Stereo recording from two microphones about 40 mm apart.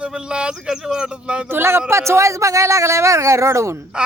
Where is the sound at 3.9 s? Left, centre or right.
Right.